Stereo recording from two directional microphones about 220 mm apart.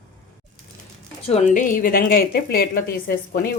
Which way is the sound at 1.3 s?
30° left (ahead or behind).